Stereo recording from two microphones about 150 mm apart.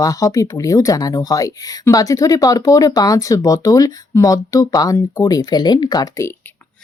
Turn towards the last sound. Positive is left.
turn(degrees=20)  # may be behind; listen again after turning